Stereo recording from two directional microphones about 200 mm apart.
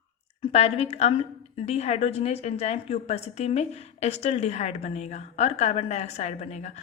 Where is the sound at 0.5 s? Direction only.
30° left (ahead or behind).